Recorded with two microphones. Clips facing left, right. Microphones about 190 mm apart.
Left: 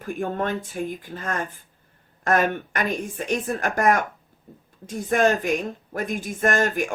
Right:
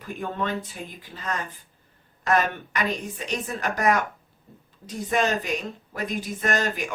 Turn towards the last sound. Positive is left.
turn(degrees=50)  # may be behind; listen again after turning